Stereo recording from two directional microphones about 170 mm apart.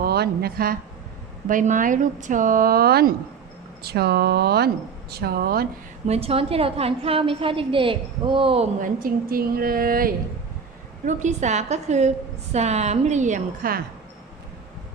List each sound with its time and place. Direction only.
0.0 s a woman's voice: 70° right (ahead or behind)
1.5 s a woman's voice: 50° right (ahead or behind)
6.1 s a woman's voice: 35° right (ahead or behind)
8.8 s a woman's voice: 55° right (ahead or behind)
11.0 s a woman's voice: 45° right (ahead or behind)